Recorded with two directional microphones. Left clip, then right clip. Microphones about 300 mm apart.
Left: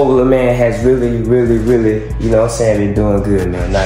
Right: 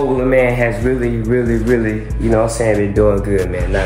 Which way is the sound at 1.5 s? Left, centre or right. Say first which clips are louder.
Left 3 dB; centre.